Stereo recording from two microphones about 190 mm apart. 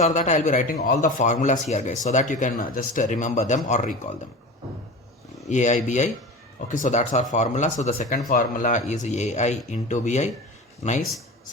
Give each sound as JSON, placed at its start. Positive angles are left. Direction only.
{"t": 0.0, "sound": "speech", "side_deg": 40}
{"t": 5.5, "sound": "speech", "side_deg": 40}